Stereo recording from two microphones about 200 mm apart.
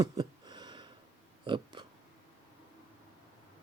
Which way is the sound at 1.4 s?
25° right (ahead or behind).